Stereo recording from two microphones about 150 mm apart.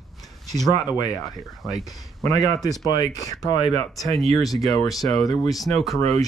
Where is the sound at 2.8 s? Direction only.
25° left (ahead or behind).